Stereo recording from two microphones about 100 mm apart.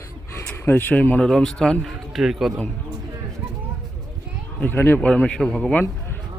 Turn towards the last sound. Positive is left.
turn(degrees=10)  # may be behind; listen again after turning